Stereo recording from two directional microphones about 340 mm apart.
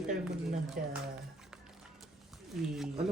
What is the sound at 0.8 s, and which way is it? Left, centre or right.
Speech, right.